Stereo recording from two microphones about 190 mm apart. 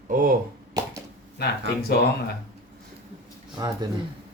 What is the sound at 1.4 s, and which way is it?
Speech, 55° left (ahead or behind).